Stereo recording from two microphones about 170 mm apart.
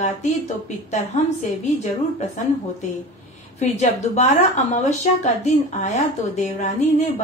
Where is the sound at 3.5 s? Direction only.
40° left (ahead or behind).